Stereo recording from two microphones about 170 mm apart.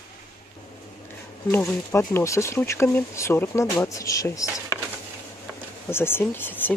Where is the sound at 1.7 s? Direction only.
10° left (ahead or behind).